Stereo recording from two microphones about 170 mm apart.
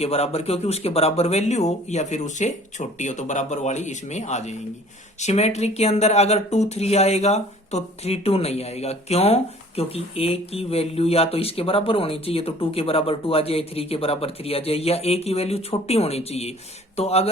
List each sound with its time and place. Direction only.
0.0 s speech: 35° left (ahead or behind)